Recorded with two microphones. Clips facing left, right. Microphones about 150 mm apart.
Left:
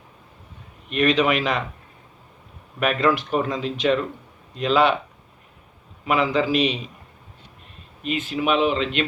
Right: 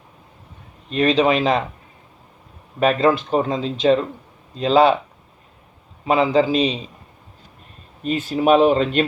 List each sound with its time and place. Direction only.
0.9 s speech: 30° right (ahead or behind)
2.8 s speech: 30° right (ahead or behind)
6.1 s speech: 30° right (ahead or behind)
8.0 s speech: 40° right (ahead or behind)